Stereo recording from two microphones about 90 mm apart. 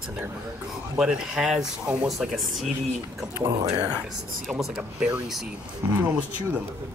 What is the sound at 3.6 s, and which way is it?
Speech, 45° right (ahead or behind).